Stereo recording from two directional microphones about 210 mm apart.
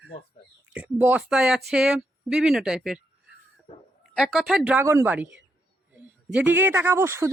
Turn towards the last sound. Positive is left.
turn(degrees=-10)  # may be behind; listen again after turning